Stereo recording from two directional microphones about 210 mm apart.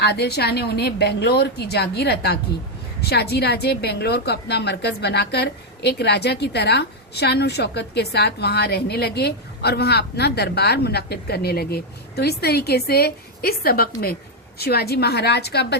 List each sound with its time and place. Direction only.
0.0 s a woman's voice: 50° left (ahead or behind)